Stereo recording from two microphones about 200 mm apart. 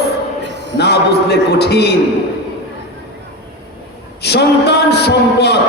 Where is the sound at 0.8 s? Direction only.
55° left (ahead or behind).